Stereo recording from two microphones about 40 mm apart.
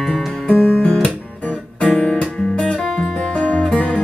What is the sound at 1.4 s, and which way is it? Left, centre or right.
Music, left.